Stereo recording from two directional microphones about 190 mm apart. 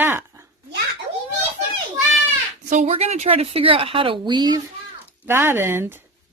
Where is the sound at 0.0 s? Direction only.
10° right (ahead or behind).